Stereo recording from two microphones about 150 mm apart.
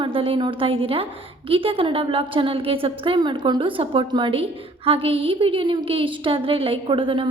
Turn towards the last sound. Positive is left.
turn(degrees=-35)  # may be behind; listen again after turning